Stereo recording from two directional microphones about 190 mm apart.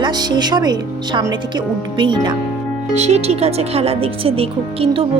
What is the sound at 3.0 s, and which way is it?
Speech, 35° right (ahead or behind).